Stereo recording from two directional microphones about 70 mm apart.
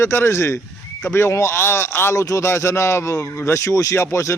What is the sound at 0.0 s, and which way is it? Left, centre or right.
A man's voice, left.